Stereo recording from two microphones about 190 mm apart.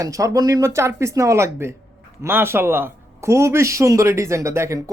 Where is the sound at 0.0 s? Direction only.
15° right (ahead or behind).